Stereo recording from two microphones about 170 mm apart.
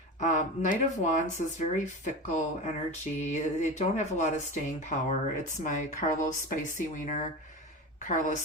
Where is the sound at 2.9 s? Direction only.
45° left (ahead or behind).